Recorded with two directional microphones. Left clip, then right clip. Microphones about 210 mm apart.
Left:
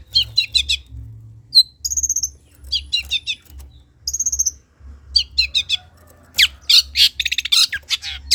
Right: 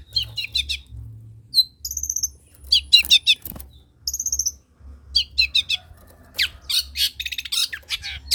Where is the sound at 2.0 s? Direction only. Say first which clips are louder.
Left 2 dB; 30° left (ahead or behind).